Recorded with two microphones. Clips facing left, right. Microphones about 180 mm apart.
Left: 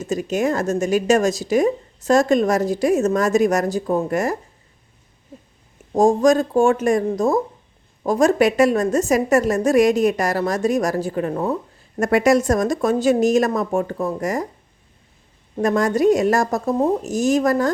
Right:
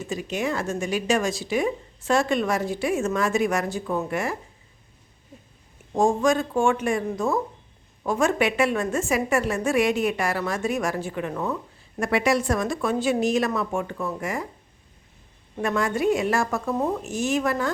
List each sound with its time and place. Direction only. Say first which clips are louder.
0.0 s a woman's voice: left 7 dB; 45° left (ahead or behind)
5.9 s a woman's voice: left 6 dB; 40° left (ahead or behind)
15.5 s a woman's voice: left 6 dB; 40° left (ahead or behind)